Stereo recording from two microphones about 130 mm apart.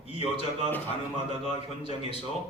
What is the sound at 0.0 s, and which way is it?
Speech, 50° left (ahead or behind).